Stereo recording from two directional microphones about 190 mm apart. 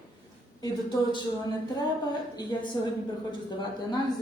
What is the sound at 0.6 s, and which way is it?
Speech, 20° left (ahead or behind).